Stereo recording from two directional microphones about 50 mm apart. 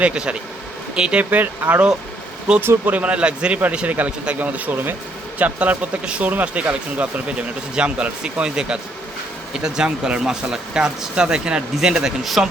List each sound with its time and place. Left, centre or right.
0.0 s a man's voice: right
1.2 s speech: right
2.9 s a man's voice: right; by 12.5 s centre